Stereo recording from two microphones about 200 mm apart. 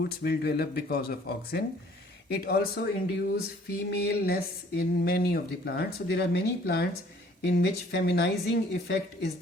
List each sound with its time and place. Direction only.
0.0 s a woman's voice: 55° left (ahead or behind)